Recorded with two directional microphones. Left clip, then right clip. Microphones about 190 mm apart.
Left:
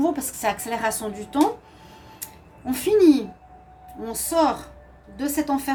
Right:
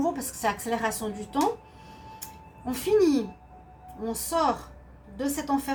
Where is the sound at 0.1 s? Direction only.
50° left (ahead or behind).